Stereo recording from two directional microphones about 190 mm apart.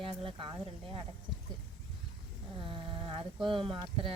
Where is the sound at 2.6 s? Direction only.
25° right (ahead or behind).